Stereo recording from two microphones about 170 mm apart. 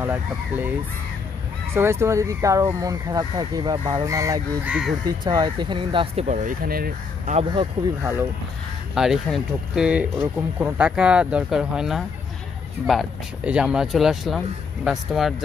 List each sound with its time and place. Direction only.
0.0 s speech: 10° right (ahead or behind)
1.8 s speech: 15° right (ahead or behind)
4.6 s speech: 5° right (ahead or behind)
5.2 s speech: 25° right (ahead or behind)
6.2 s speech: 45° right (ahead or behind)
8.0 s speech: 15° right (ahead or behind)